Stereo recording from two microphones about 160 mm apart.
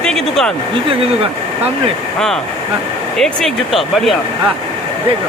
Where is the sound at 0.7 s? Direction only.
35° right (ahead or behind).